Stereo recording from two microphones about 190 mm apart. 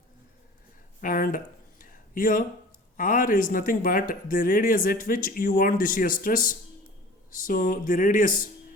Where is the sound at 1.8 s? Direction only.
45° left (ahead or behind).